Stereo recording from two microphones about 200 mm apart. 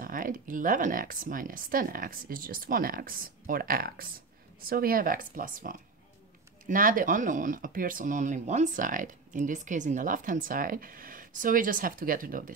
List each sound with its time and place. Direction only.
0.0 s speech: 45° right (ahead or behind)